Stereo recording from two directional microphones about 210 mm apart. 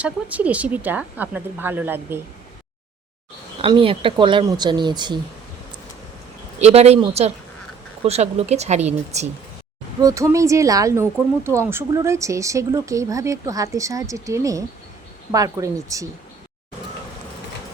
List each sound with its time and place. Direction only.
0.0 s speech: 5° right (ahead or behind)
3.6 s speech: 25° right (ahead or behind)
6.6 s speech: 30° right (ahead or behind)
10.0 s speech: 15° right (ahead or behind)